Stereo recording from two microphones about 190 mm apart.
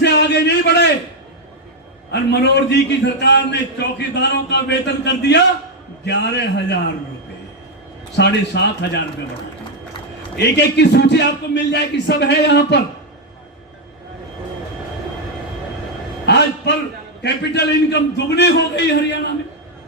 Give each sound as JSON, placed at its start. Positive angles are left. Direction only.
{"t": 0.0, "sound": "a sound", "side_deg": 65}
{"t": 2.1, "sound": "a man's voice", "side_deg": 65}
{"t": 8.1, "sound": "a man's voice", "side_deg": 65}
{"t": 10.3, "sound": "a man's voice", "side_deg": 60}
{"t": 16.2, "sound": "a sound", "side_deg": 65}
{"t": 17.2, "sound": "a man's voice", "side_deg": 65}